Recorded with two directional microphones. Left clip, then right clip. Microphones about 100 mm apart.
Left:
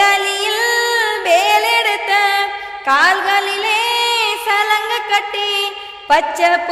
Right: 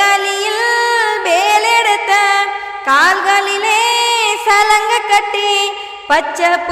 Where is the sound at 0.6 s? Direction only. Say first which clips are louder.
Right 3 dB; 35° right (ahead or behind).